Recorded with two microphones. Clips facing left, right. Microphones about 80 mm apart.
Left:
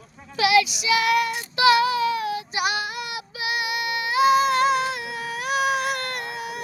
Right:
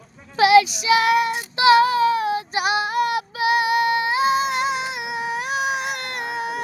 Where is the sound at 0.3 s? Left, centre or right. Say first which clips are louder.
Right 5 dB; right.